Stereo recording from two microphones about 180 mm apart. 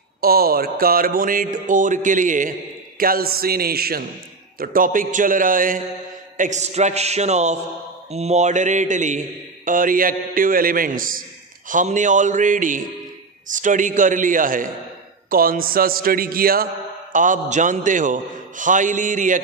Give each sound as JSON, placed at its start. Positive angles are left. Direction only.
{"t": 0.2, "sound": "mantra", "side_deg": -55}
{"t": 3.0, "sound": "a man's voice", "side_deg": -55}
{"t": 4.6, "sound": "mantra", "side_deg": -50}
{"t": 6.3, "sound": "a man's voice", "side_deg": -45}
{"t": 8.1, "sound": "mantra", "side_deg": -35}
{"t": 15.2, "sound": "a man's voice", "side_deg": -55}
{"t": 17.1, "sound": "mantra", "side_deg": -45}